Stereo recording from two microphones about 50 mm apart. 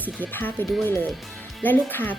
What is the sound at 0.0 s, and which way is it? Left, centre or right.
Speech, left.